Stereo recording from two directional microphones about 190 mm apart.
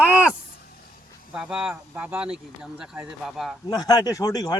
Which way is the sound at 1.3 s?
5° right (ahead or behind).